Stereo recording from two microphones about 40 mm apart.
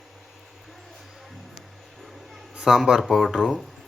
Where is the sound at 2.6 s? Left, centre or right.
Centre.